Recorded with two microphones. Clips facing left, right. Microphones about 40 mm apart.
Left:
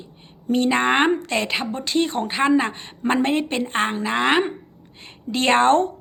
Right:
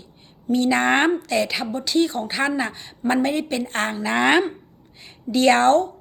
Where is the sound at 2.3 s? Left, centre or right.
Left.